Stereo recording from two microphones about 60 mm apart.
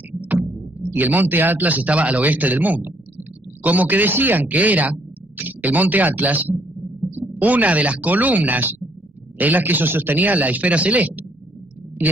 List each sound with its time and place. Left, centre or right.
0.7 s speech: right